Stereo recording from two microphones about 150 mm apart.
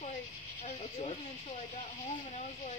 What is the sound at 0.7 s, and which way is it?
Speech, 50° left (ahead or behind).